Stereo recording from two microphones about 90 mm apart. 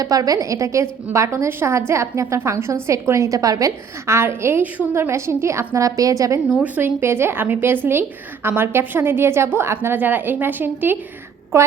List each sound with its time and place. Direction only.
0.0 s a woman's voice: 45° right (ahead or behind)
6.5 s a woman's voice: 20° right (ahead or behind)
11.5 s a woman's voice: 35° right (ahead or behind)